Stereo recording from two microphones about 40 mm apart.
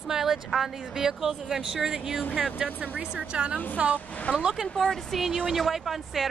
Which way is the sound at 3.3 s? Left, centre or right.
Right.